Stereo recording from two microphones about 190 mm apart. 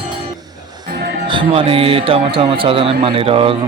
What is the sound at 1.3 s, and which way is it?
Speech, 30° right (ahead or behind).